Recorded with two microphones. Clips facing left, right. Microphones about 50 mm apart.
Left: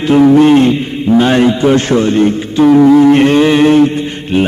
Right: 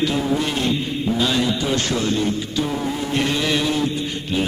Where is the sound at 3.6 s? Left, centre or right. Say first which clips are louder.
Left 13 dB; left.